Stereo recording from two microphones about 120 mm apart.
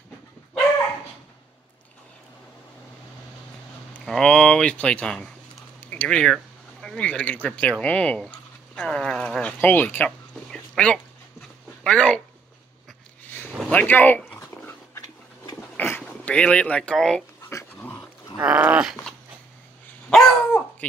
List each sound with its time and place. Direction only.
3.9 s speech: 5° left (ahead or behind)
5.8 s a sound: 15° left (ahead or behind)
7.4 s speech: 10° left (ahead or behind)
8.7 s a sound: 5° left (ahead or behind)
11.8 s speech: 10° left (ahead or behind)
13.7 s dog: 15° left (ahead or behind)
15.5 s a sound: 20° left (ahead or behind)
17.5 s dog: 25° left (ahead or behind)
18.4 s dog: 10° right (ahead or behind)
20.1 s dog: 5° left (ahead or behind)